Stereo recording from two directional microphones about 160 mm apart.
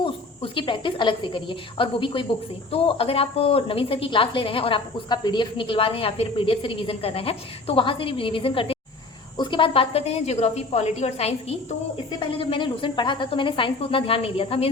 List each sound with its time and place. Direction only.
0.0 s speech: 30° left (ahead or behind)